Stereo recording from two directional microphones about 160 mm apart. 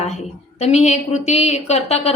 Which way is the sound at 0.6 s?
45° left (ahead or behind).